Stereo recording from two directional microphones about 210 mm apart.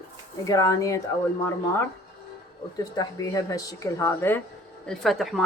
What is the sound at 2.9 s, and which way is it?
Speech, 15° left (ahead or behind).